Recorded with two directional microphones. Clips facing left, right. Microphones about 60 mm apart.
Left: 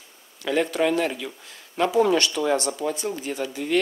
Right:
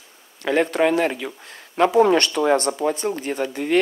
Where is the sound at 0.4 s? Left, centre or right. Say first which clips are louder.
Right 4 dB; right.